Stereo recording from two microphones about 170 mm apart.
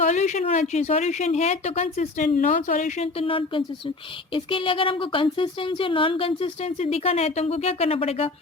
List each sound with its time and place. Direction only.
0.0 s speech: 45° left (ahead or behind)